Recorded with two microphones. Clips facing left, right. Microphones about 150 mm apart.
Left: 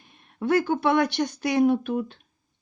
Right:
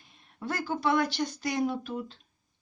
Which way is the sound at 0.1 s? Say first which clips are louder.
Left 13 dB; 60° left (ahead or behind).